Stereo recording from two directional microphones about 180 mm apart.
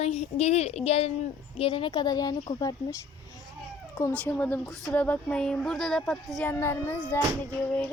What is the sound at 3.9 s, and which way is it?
A woman's voice, 10° left (ahead or behind).